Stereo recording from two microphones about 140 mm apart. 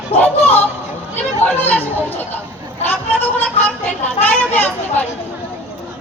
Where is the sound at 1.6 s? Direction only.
10° left (ahead or behind).